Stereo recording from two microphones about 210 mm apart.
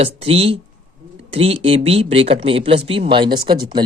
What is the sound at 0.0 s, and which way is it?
Speech, 30° right (ahead or behind).